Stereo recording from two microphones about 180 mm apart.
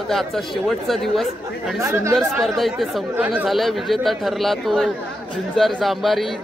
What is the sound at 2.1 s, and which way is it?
Speech, centre (ahead or behind).